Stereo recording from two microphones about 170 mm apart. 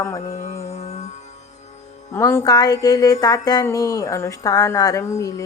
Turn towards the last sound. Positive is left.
turn(degrees=15)  # may be behind; listen again after turning